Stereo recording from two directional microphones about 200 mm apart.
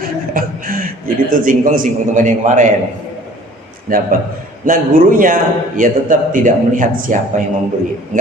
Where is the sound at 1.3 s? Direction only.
45° right (ahead or behind).